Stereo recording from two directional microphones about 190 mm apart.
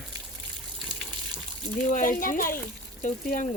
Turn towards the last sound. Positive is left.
turn(degrees=40)  # may be behind; listen again after turning